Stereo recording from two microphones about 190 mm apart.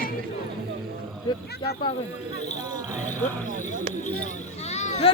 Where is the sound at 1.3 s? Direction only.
20° left (ahead or behind).